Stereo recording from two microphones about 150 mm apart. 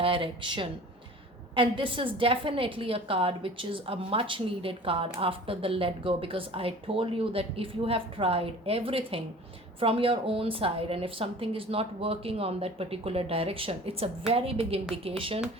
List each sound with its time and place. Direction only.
0.0 s a woman's voice: 35° right (ahead or behind)